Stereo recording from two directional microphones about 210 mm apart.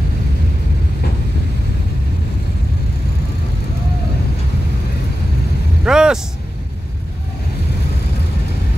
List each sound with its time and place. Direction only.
5.9 s vehicle: 5° right (ahead or behind)